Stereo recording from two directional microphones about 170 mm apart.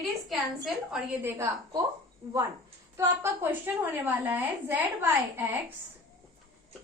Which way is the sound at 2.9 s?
15° right (ahead or behind).